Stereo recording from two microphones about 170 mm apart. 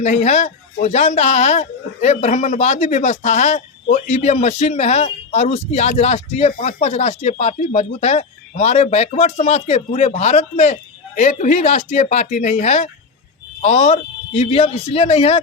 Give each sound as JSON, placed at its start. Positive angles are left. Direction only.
{"t": 0.0, "sound": "speech", "side_deg": 40}